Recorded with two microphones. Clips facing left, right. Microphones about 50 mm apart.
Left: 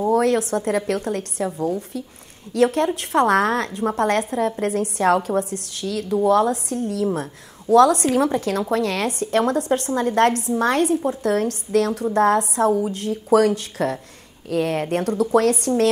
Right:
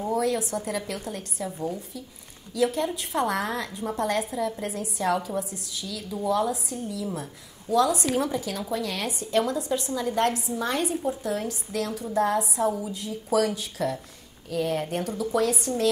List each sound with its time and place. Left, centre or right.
0.1 s a woman's voice: left